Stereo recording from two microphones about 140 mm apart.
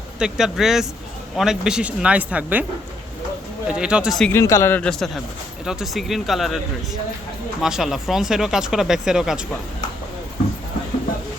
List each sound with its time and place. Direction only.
0.2 s speech: 5° right (ahead or behind)
3.7 s speech: 5° right (ahead or behind)
4.3 s speech: 20° left (ahead or behind)
4.8 s speech: 5° left (ahead or behind)
7.6 s speech: centre (ahead or behind)